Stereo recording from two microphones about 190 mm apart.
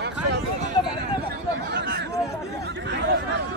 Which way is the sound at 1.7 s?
65° right (ahead or behind).